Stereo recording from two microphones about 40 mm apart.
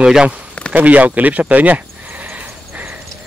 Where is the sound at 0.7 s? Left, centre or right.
Right.